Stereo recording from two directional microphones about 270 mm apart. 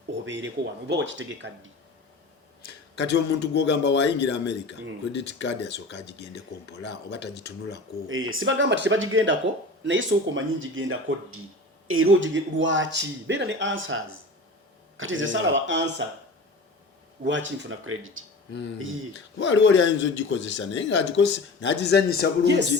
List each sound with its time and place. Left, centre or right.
0.3 s speech: right
2.9 s a man's voice: left
8.0 s speech: right
17.2 s speech: right
19.4 s speech: left